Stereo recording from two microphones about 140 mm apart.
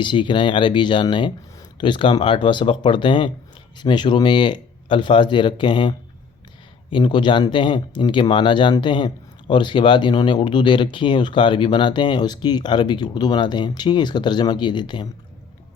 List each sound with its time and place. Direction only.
0.0 s speech: 35° left (ahead or behind)